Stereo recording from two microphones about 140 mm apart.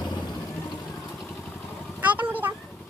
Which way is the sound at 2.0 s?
10° right (ahead or behind).